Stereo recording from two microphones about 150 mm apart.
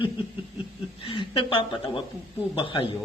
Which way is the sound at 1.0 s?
30° left (ahead or behind).